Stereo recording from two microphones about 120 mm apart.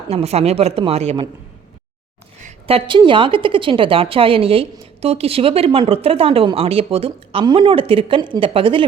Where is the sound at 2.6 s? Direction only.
50° right (ahead or behind).